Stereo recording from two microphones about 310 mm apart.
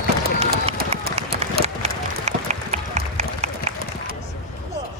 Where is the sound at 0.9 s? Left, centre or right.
Right.